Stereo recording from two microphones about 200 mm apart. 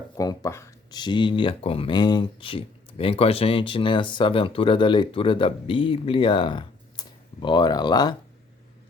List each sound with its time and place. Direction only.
0.2 s speech: 15° left (ahead or behind)